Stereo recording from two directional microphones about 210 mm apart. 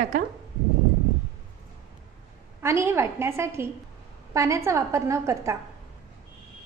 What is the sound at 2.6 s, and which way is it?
A woman's voice, 10° right (ahead or behind).